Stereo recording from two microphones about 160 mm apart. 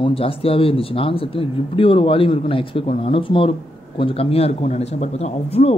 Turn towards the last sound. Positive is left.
turn(degrees=40)  # may be behind; listen again after turning